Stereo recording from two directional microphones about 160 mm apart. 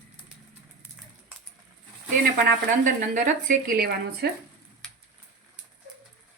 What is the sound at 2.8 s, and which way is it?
Speech, 55° right (ahead or behind).